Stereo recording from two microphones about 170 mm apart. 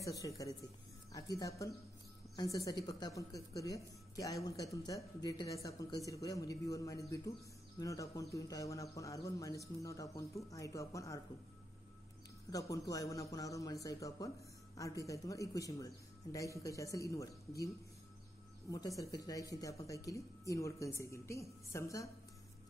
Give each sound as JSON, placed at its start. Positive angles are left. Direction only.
{"t": 0.0, "sound": "speech", "side_deg": 20}
{"t": 12.4, "sound": "speech", "side_deg": 20}
{"t": 18.7, "sound": "speech", "side_deg": 20}